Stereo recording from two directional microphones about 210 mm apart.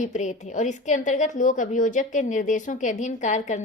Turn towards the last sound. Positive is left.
turn(degrees=35)  # may be behind; listen again after turning